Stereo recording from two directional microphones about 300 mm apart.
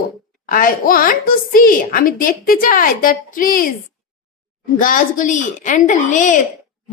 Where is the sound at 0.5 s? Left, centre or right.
Left.